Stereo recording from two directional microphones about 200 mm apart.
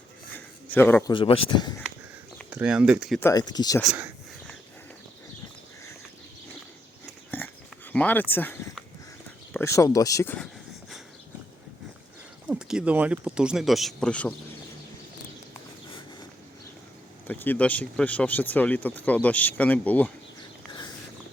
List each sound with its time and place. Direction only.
0.3 s a sound: 10° left (ahead or behind)
1.1 s speech: 25° left (ahead or behind)
2.5 s speech: 5° right (ahead or behind)
3.2 s speech: 15° left (ahead or behind)
3.8 s speech: 10° right (ahead or behind)
7.3 s a sound: 10° left (ahead or behind)
7.9 s speech: 10° left (ahead or behind)
12.5 s speech: 5° right (ahead or behind)
17.2 s speech: 10° left (ahead or behind)